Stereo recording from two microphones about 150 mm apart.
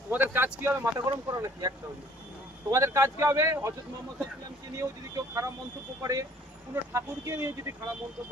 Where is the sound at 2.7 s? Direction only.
20° right (ahead or behind).